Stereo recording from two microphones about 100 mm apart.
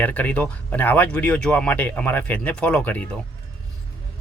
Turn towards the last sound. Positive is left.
turn(degrees=15)  # may be behind; listen again after turning